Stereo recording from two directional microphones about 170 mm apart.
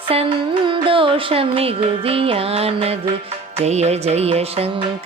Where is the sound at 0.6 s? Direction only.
30° right (ahead or behind).